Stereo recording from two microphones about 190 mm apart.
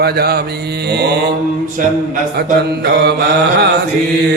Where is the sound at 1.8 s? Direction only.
45° right (ahead or behind).